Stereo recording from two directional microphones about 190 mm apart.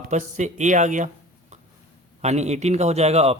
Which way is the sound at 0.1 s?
40° right (ahead or behind).